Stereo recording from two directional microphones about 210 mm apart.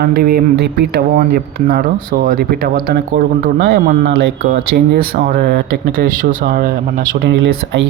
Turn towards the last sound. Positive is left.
turn(degrees=-55)  # may be behind; listen again after turning